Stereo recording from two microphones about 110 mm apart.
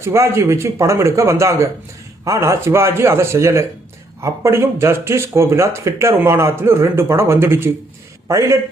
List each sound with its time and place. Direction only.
0.0 s speech: 25° right (ahead or behind)